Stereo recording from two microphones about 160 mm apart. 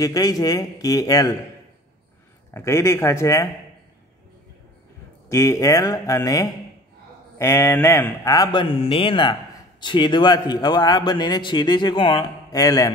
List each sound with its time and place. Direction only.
0.0 s speech: 25° left (ahead or behind)
2.5 s speech: 20° left (ahead or behind)
5.3 s speech: 20° left (ahead or behind)